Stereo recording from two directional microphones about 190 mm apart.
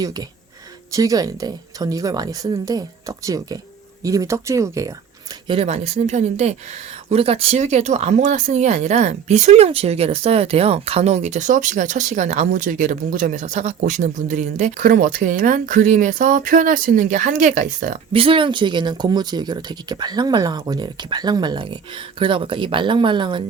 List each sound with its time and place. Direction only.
0.9 s speech: 20° right (ahead or behind)
5.5 s speech: 30° right (ahead or behind)
18.1 s speech: 30° right (ahead or behind)